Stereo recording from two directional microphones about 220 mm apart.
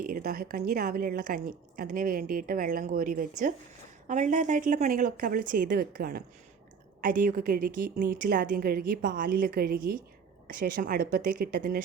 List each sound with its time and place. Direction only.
0.0 s a woman's voice: 40° right (ahead or behind)